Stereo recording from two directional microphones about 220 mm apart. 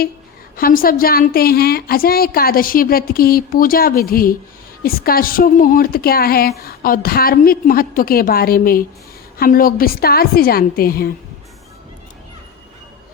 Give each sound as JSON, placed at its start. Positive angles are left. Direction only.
{"t": 0.5, "sound": "a woman's voice", "side_deg": 40}